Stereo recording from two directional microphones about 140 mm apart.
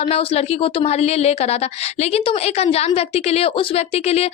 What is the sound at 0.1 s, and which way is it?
A woman's voice, 45° left (ahead or behind).